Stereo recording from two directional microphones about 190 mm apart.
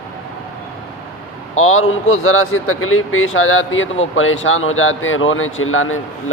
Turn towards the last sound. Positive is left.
turn(degrees=90)